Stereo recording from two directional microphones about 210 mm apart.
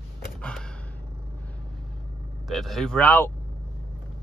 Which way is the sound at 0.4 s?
5° left (ahead or behind).